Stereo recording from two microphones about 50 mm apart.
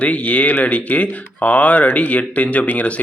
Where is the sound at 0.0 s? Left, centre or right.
Left.